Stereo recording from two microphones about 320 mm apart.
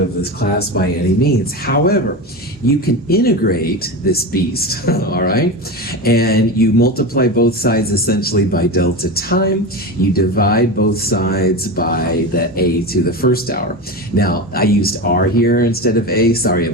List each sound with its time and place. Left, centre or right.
0.7 s speech: left